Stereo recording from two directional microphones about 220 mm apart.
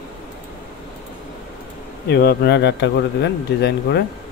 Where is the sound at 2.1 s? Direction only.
50° left (ahead or behind).